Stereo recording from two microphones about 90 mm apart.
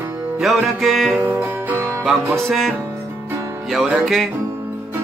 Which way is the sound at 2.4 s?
Centre (ahead or behind).